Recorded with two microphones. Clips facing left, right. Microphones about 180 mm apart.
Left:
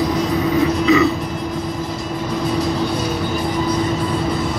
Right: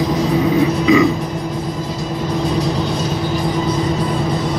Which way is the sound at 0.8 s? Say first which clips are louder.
Right 2 dB; 15° right (ahead or behind).